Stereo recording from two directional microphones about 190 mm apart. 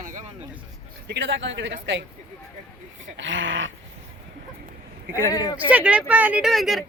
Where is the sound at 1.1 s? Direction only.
70° right (ahead or behind).